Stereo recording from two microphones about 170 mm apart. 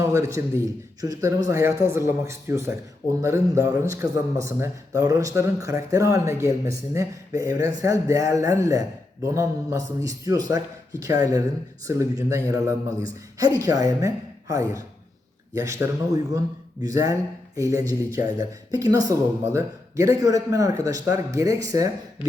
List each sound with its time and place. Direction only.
0.0 s a man's voice: 15° right (ahead or behind)